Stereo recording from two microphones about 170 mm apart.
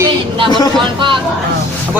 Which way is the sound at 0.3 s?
30° right (ahead or behind).